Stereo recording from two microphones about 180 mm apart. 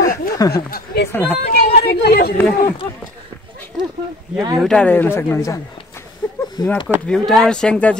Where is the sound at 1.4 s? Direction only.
65° left (ahead or behind).